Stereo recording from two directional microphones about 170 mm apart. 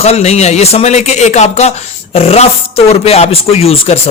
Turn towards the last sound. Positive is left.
turn(degrees=35)  # may be behind; listen again after turning